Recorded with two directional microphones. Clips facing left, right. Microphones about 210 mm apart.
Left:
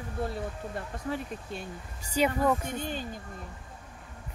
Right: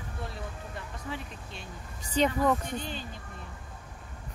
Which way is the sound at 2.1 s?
10° left (ahead or behind).